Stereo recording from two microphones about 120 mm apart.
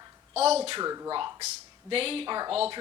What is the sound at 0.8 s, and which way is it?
Speech, 35° right (ahead or behind).